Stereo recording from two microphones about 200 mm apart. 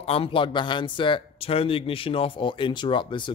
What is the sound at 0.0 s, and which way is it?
Speech, 30° left (ahead or behind).